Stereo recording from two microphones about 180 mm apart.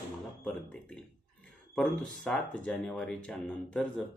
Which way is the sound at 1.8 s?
5° left (ahead or behind).